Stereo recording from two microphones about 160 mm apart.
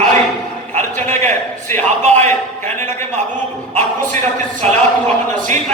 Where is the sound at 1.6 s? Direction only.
15° left (ahead or behind).